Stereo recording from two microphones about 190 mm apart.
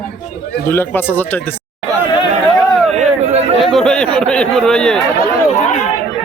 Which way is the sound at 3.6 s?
Centre (ahead or behind).